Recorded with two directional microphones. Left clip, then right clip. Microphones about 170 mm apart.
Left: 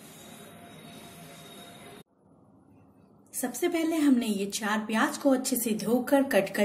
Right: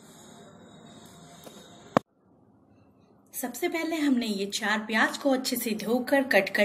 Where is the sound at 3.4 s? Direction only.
40° left (ahead or behind).